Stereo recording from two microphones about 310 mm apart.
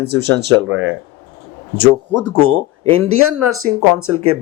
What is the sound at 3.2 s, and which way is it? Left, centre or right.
Speech, right.